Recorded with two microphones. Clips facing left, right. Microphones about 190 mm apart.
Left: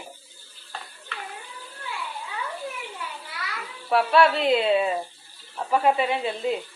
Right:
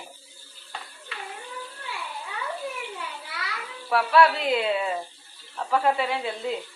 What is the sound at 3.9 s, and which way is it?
A woman's voice, 25° left (ahead or behind).